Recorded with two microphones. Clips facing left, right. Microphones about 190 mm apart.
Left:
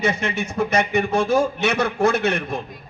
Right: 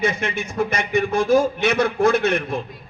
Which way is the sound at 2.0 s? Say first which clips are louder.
Even; 55° right (ahead or behind).